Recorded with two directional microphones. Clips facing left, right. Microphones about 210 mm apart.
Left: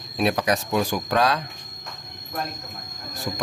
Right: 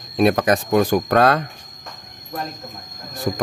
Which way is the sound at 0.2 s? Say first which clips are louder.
Right 6 dB; 50° right (ahead or behind).